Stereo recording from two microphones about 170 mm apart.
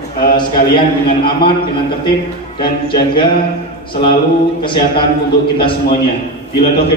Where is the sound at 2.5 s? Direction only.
30° left (ahead or behind).